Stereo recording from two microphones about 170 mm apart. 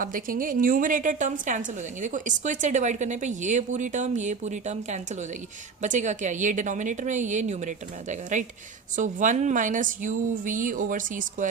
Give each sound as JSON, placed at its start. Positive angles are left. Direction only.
{"t": 0.0, "sound": "a woman's voice", "side_deg": -55}